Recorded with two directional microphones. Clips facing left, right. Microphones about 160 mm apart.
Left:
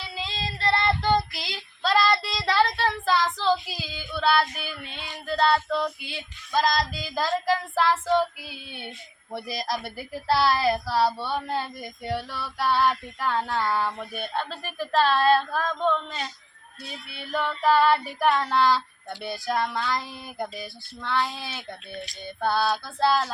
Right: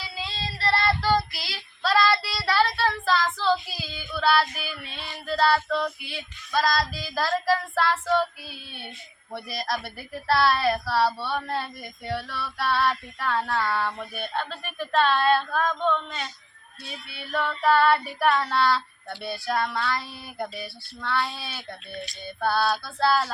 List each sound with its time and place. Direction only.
0.7 s child singing: 20° left (ahead or behind)
9.5 s speech: 20° left (ahead or behind)
14.3 s a sound: 30° left (ahead or behind)
17.3 s speech: 20° left (ahead or behind)
19.3 s child singing: 15° left (ahead or behind)